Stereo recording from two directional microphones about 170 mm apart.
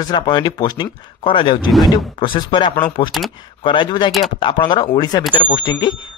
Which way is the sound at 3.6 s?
30° left (ahead or behind).